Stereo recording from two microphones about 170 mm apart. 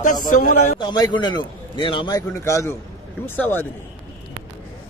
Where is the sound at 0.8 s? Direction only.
25° left (ahead or behind).